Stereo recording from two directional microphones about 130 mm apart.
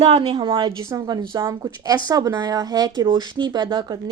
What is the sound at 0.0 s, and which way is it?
A woman's voice, 50° right (ahead or behind).